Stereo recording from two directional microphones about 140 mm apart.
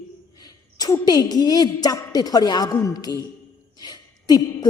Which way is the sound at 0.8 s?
25° left (ahead or behind).